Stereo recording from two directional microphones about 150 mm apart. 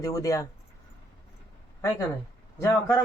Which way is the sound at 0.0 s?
25° left (ahead or behind).